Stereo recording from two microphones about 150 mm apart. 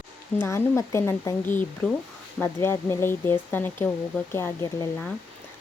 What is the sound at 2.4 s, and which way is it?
A woman's voice, 15° left (ahead or behind).